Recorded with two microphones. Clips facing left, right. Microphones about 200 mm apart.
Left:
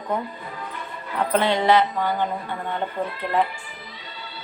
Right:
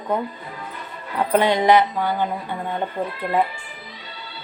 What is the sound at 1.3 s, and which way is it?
Speech, 10° right (ahead or behind).